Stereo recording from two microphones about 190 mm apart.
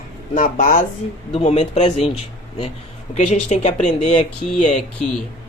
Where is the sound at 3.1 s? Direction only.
35° left (ahead or behind).